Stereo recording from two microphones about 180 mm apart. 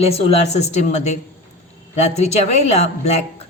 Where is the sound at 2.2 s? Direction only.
40° left (ahead or behind).